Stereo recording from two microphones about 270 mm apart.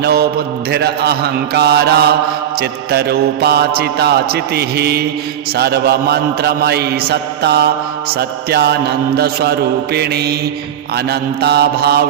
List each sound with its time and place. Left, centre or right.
0.0 s mantra: right